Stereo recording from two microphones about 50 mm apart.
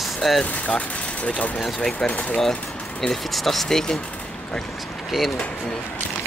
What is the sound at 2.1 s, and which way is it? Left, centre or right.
Speech, left.